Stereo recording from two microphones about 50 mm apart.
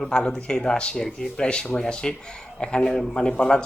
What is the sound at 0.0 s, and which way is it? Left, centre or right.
A man's voice, centre.